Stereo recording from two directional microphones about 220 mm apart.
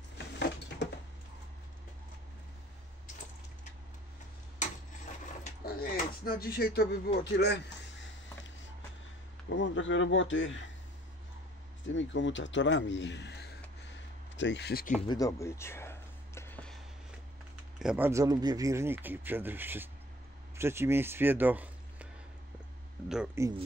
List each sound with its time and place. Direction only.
5.4 s a sound: 40° left (ahead or behind)
7.3 s speech: 50° left (ahead or behind)
9.5 s a man's voice: 55° left (ahead or behind)
11.9 s a man's voice: 55° left (ahead or behind)
15.0 s a sound: 15° left (ahead or behind)
17.7 s a man's voice: 5° right (ahead or behind)
23.0 s speech: 5° right (ahead or behind)